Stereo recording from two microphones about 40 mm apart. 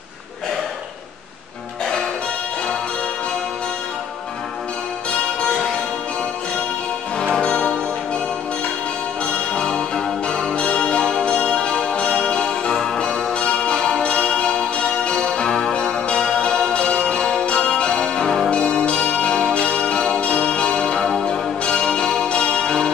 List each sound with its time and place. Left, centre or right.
7.4 s music: left
9.2 s music: left
12.7 s music: centre
13.0 s music: left
18.5 s bell: left